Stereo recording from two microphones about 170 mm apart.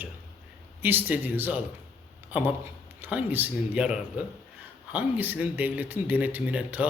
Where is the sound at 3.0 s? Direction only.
10° right (ahead or behind).